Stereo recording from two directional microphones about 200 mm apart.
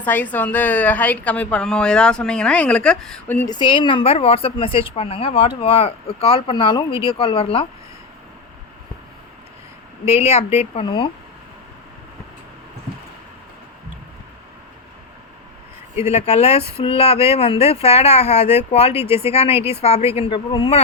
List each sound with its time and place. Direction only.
0.0 s a woman's voice: 10° left (ahead or behind)
3.5 s speech: 25° left (ahead or behind)
10.1 s speech: 30° left (ahead or behind)
16.0 s speech: 30° left (ahead or behind)
18.9 s speech: 10° right (ahead or behind)
19.3 s speech: 30° left (ahead or behind)
19.5 s speech: 10° right (ahead or behind)
19.8 s speech: 30° left (ahead or behind)